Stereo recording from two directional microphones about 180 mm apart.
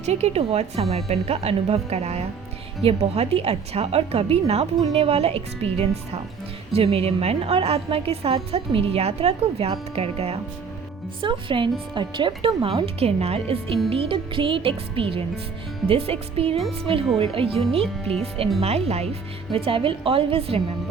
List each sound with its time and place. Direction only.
0.0 s a woman's voice: 35° right (ahead or behind)
16.6 s speech: centre (ahead or behind)
17.2 s a woman's voice: 30° right (ahead or behind)
18.6 s a woman's voice: 35° right (ahead or behind)